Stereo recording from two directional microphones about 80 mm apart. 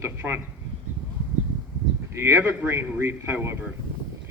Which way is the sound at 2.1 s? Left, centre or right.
Right.